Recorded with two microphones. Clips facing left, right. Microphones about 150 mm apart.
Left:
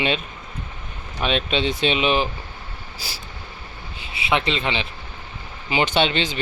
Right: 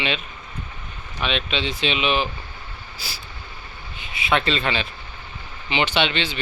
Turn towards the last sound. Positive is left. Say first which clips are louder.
# left 2 dB
turn(degrees=40)  # may be behind; listen again after turning